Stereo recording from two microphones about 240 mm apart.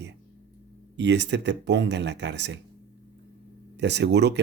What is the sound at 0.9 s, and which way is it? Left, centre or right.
Speech, right.